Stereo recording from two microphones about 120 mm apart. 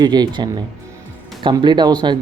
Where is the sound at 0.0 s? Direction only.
35° right (ahead or behind).